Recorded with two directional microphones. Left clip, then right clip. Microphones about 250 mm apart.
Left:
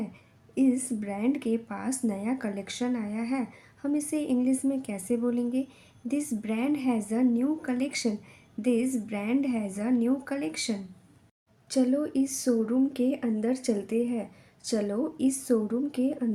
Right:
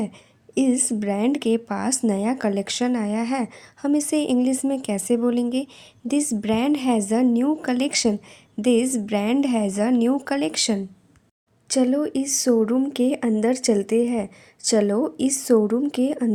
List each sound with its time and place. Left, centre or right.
0.5 s speech: right